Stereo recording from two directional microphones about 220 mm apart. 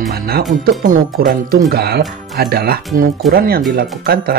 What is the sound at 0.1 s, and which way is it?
Speech, 45° right (ahead or behind).